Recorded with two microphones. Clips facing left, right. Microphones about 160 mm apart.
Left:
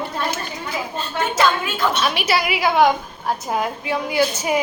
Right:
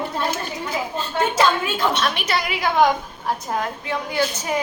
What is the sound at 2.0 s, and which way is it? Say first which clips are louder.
A woman's voice: left 3 dB; 5° left (ahead or behind).